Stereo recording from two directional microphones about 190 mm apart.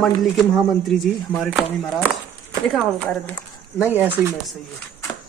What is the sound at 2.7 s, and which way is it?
Speech, 5° left (ahead or behind).